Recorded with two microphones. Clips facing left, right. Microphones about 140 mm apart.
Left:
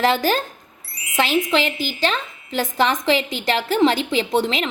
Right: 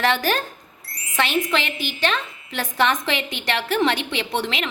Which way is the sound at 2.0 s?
30° left (ahead or behind).